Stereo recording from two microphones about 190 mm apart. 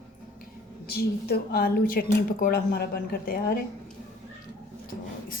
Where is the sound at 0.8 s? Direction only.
55° left (ahead or behind).